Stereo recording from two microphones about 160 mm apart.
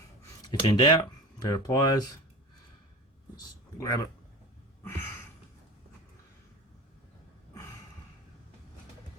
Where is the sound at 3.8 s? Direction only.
20° left (ahead or behind).